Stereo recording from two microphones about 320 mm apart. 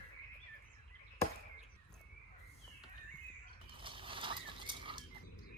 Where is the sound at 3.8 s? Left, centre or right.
Centre.